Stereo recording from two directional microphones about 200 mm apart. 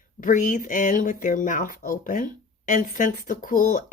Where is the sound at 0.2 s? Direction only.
40° left (ahead or behind).